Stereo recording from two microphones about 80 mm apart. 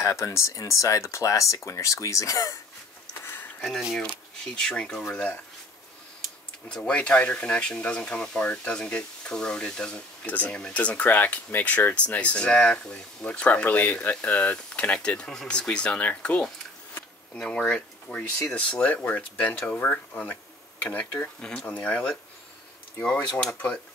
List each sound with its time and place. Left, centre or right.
0.0 s speech: left
4.6 s speech: centre
6.7 s speech: centre